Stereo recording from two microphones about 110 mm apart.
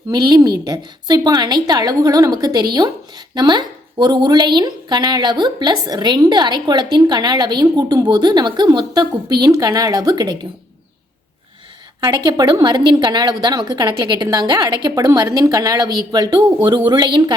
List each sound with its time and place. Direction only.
0.1 s a woman's voice: 40° right (ahead or behind)
11.9 s a woman's voice: 35° right (ahead or behind)